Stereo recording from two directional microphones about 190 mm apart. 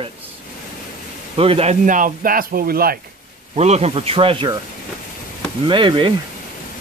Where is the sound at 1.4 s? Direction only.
30° right (ahead or behind); by 2.9 s 50° right (ahead or behind).